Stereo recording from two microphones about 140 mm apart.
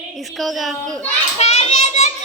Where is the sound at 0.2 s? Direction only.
Centre (ahead or behind).